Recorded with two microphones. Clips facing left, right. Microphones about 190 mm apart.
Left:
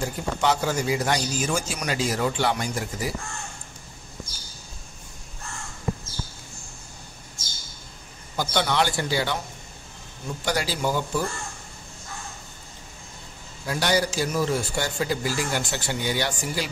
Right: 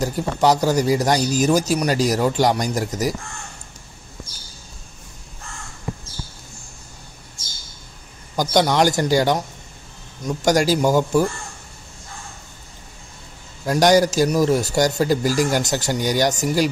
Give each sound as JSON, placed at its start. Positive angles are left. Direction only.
{"t": 0.0, "sound": "a man's voice", "side_deg": -40}
{"t": 8.4, "sound": "a man's voice", "side_deg": -40}
{"t": 10.4, "sound": "speech", "side_deg": -45}
{"t": 13.7, "sound": "a man's voice", "side_deg": -45}